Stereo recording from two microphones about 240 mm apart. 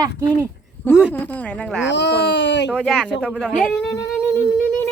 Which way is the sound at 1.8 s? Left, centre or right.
Left.